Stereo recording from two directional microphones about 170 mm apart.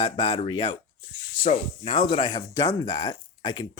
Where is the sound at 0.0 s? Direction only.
35° left (ahead or behind).